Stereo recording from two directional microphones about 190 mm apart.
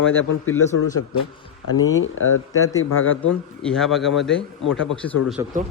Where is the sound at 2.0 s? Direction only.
90° left.